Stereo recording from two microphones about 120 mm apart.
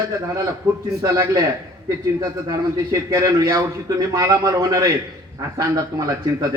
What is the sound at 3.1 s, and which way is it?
Speech, 25° right (ahead or behind).